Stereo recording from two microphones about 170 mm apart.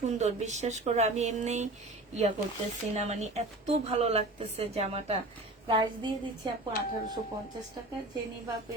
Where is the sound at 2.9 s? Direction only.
40° right (ahead or behind).